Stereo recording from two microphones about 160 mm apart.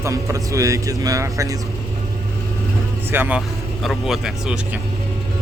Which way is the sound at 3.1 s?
10° right (ahead or behind).